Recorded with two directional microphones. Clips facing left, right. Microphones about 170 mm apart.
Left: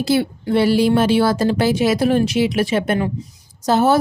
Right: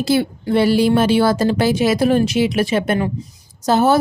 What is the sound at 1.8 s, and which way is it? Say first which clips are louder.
Speech: right 2 dB; 45° right (ahead or behind).